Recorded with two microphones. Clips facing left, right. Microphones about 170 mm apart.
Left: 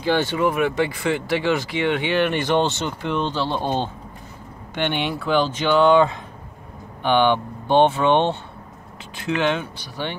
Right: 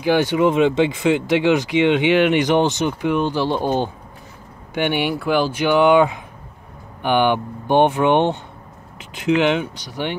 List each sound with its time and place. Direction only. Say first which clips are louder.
0.0 s speech: right 4 dB; 15° right (ahead or behind)